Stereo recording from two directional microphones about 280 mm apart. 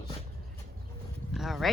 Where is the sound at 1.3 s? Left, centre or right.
Centre.